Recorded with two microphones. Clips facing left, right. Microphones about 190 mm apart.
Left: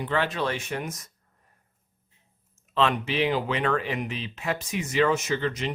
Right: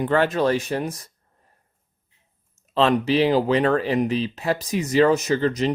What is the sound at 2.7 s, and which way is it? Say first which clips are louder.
Speech: right 6 dB; 35° right (ahead or behind).